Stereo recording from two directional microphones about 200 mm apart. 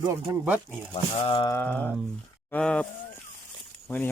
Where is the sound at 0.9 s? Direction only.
30° left (ahead or behind).